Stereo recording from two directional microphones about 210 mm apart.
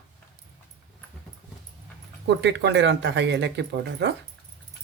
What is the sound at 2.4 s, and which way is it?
Speech, 55° right (ahead or behind).